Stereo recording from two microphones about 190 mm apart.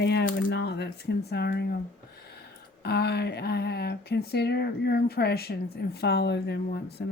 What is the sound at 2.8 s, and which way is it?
Speech, 55° left (ahead or behind).